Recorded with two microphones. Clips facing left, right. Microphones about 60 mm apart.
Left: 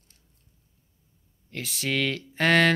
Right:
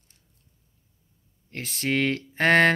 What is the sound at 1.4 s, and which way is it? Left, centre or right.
Speech, right.